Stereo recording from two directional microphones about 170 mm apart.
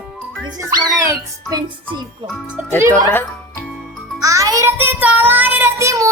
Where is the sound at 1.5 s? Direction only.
25° right (ahead or behind).